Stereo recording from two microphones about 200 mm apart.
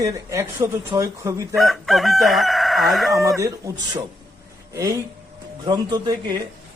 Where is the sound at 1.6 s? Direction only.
Centre (ahead or behind).